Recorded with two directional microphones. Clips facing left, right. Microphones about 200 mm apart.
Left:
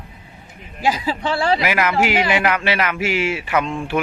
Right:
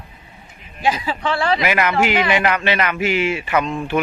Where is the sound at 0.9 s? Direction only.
35° left (ahead or behind).